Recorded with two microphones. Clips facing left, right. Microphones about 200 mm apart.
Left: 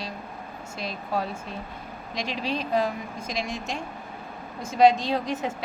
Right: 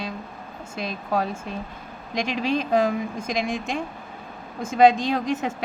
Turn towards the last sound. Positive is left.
turn(degrees=-50)  # may be behind; listen again after turning